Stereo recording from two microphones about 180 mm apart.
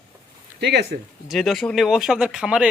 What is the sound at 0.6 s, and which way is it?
Speech, 70° right (ahead or behind).